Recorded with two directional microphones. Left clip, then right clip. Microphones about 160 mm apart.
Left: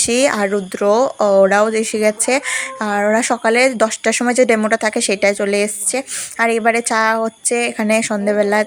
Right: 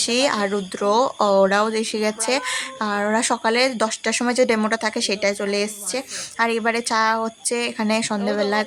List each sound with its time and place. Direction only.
0.0 s speech: 25° left (ahead or behind)